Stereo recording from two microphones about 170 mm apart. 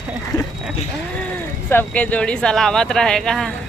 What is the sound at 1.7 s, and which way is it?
Speech, 10° left (ahead or behind).